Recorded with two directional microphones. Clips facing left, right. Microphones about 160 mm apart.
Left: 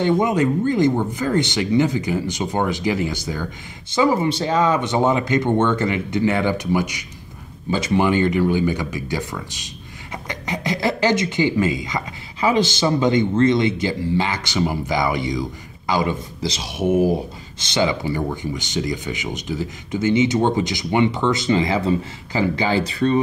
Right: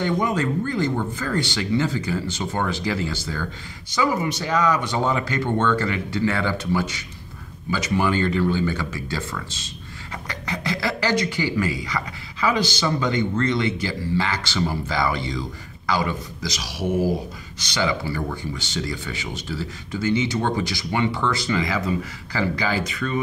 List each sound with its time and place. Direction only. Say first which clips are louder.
0.0 s speech: left 5 dB; 20° left (ahead or behind)